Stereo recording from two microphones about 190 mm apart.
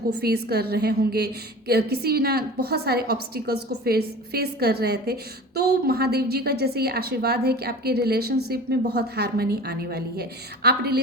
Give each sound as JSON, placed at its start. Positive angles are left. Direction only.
{"t": 0.1, "sound": "a woman's voice", "side_deg": -55}